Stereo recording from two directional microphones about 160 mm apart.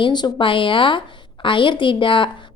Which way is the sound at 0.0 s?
30° left (ahead or behind).